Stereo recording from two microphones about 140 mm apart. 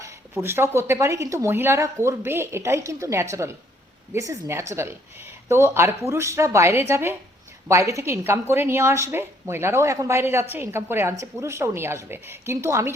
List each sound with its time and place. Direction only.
0.4 s a woman's voice: 15° right (ahead or behind)